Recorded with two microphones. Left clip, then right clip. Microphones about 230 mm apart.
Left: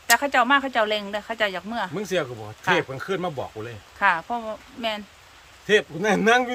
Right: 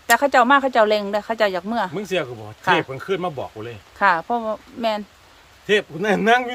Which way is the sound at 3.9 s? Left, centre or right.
Right.